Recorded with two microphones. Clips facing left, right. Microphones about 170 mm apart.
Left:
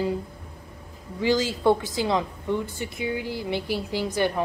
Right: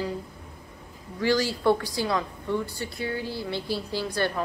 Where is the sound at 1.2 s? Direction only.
20° left (ahead or behind).